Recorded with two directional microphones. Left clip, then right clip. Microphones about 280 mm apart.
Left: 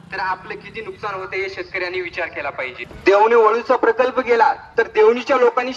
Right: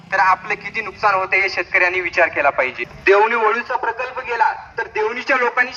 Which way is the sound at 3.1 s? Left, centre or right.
Left.